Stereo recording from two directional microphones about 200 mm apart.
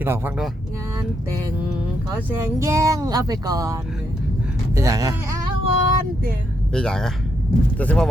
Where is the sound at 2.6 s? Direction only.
15° right (ahead or behind).